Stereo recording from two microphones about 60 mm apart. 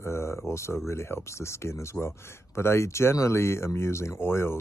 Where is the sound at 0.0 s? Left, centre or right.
Left.